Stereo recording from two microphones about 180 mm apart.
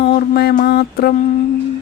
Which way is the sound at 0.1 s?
60° left (ahead or behind).